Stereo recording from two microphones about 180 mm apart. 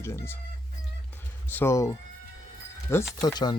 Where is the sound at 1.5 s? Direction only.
15° left (ahead or behind).